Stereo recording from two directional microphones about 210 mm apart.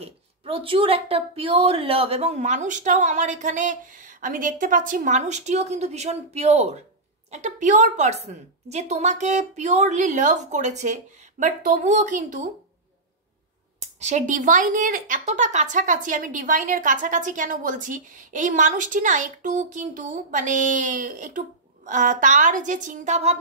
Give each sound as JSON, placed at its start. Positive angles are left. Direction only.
{"t": 0.0, "sound": "speech", "side_deg": -25}
{"t": 13.7, "sound": "speech", "side_deg": -35}